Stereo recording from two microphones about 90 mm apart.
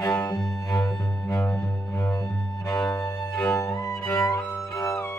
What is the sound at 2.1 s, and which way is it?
Cello, 40° left (ahead or behind).